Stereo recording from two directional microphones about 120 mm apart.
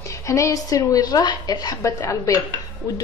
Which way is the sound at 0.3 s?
25° left (ahead or behind).